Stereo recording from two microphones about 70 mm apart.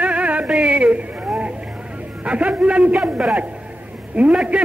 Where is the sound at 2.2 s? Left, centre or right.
Centre.